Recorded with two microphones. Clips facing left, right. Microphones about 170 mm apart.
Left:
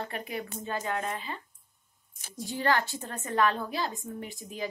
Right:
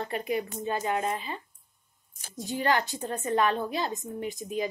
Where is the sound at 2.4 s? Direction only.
20° right (ahead or behind).